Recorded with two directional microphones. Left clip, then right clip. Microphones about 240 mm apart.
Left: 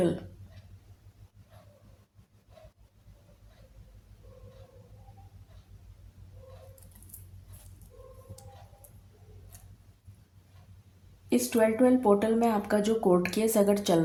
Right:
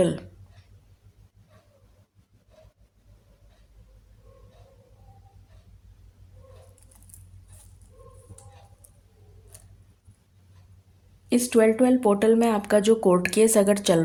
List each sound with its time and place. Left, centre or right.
11.3 s speech: right